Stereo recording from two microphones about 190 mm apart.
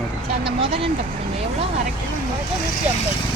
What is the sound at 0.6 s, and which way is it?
Speech, 30° right (ahead or behind).